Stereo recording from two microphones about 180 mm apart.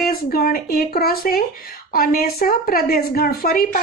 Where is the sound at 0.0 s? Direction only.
55° left (ahead or behind).